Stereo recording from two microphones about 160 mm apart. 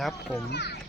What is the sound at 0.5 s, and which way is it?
Speech, 90° left.